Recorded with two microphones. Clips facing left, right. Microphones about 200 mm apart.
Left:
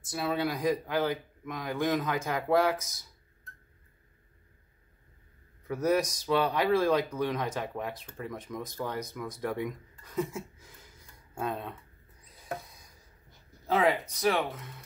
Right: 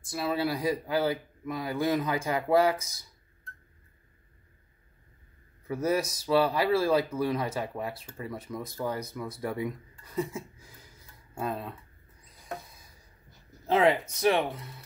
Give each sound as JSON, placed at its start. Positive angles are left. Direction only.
{"t": 0.1, "sound": "speech", "side_deg": 0}
{"t": 5.7, "sound": "speech", "side_deg": -10}
{"t": 11.3, "sound": "speech", "side_deg": 0}
{"t": 13.7, "sound": "speech", "side_deg": -25}